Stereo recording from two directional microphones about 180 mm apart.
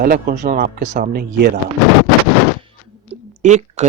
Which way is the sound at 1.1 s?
60° right (ahead or behind).